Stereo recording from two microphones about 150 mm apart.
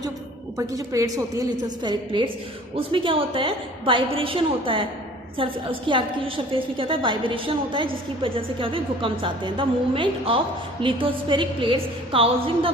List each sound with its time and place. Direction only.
0.5 s a woman's voice: 20° right (ahead or behind); by 12.7 s 35° right (ahead or behind)